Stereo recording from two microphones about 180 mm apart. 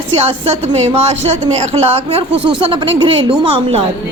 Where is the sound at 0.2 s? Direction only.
35° right (ahead or behind).